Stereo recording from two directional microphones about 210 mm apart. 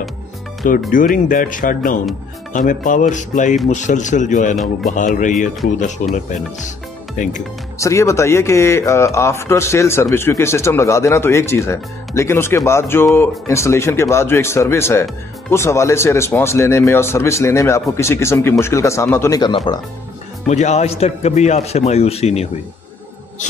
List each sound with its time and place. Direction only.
0.9 s speech: 40° left (ahead or behind)
7.2 s speech: 40° left (ahead or behind)
7.8 s speech: 15° left (ahead or behind)
20.4 s speech: 35° left (ahead or behind)